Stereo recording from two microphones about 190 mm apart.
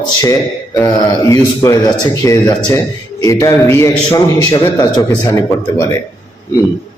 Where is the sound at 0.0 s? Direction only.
20° left (ahead or behind).